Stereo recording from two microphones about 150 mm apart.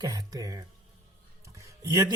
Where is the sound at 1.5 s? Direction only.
20° right (ahead or behind).